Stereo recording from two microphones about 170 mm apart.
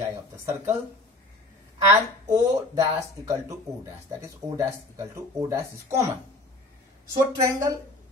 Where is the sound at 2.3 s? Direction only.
15° right (ahead or behind).